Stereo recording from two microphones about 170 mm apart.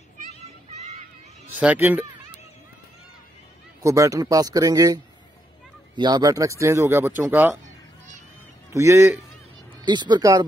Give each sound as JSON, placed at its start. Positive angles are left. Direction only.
{"t": 1.6, "sound": "speech", "side_deg": -10}
{"t": 3.8, "sound": "speech", "side_deg": -20}
{"t": 8.7, "sound": "speech", "side_deg": -15}